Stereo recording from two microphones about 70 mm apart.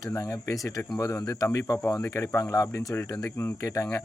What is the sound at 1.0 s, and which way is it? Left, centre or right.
Speech, left.